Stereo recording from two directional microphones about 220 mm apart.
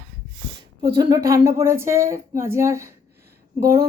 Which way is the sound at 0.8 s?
20° right (ahead or behind).